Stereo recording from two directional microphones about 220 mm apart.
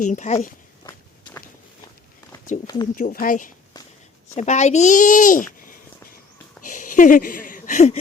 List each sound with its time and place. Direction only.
0.0 s a child's voice: 35° left (ahead or behind)
0.9 s walk: 15° left (ahead or behind)
2.9 s a child's voice: 40° left (ahead or behind)
6.7 s a sound: 35° left (ahead or behind)